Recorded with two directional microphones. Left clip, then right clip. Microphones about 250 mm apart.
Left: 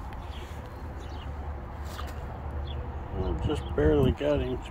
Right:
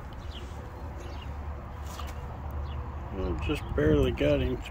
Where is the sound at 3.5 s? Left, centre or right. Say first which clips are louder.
Left 1 dB; centre.